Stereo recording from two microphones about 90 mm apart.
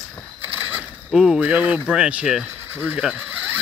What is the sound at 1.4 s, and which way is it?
Speech, 20° right (ahead or behind).